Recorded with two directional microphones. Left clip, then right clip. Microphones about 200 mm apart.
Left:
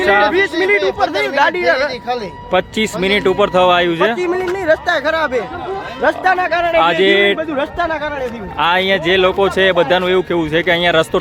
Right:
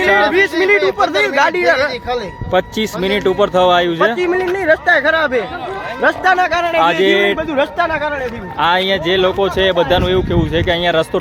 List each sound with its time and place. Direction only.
0.0 s speech: centre (ahead or behind)
0.9 s speech: 45° right (ahead or behind)
2.5 s speech: centre (ahead or behind)
4.6 s speech: 35° right (ahead or behind)
6.0 s speech: 45° right (ahead or behind)
7.0 s speech: centre (ahead or behind)
7.3 s speech: 55° right (ahead or behind)
8.5 s speech: centre (ahead or behind)